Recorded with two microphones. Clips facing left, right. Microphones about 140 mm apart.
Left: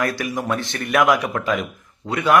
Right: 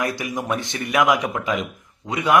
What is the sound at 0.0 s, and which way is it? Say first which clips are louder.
A man's voice: left 2 dB; 20° right (ahead or behind).